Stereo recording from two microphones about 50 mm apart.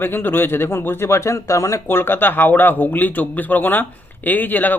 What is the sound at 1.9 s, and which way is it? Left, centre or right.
Speech, left.